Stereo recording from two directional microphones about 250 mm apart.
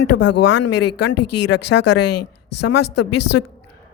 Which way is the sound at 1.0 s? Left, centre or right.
Left.